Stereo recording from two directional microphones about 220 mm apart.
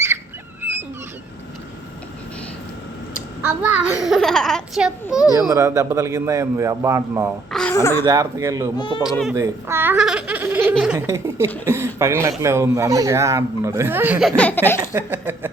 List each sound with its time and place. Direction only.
3.4 s a child's voice: 5° right (ahead or behind)
5.3 s a man's voice: 15° right (ahead or behind)
7.5 s a sound: 10° left (ahead or behind)
8.0 s a man's voice: 15° right (ahead or behind)
9.0 s a child's voice: centre (ahead or behind)
9.3 s a man's voice: 10° right (ahead or behind); by 14.8 s 10° left (ahead or behind)
14.9 s chuckle: 10° right (ahead or behind)